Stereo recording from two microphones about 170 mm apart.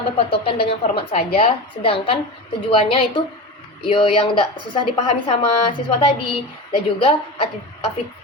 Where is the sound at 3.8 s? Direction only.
30° left (ahead or behind).